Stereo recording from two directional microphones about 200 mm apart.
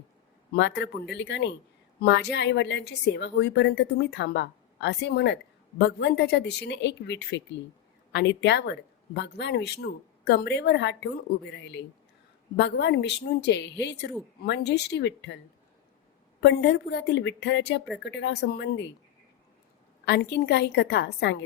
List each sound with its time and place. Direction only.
0.5 s speech: 60° left (ahead or behind)
16.4 s speech: 55° left (ahead or behind)
20.1 s speech: 60° left (ahead or behind)